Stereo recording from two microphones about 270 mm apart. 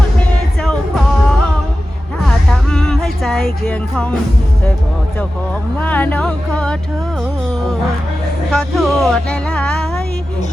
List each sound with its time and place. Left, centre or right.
0.6 s music: centre
5.8 s speech: centre
8.5 s speech: centre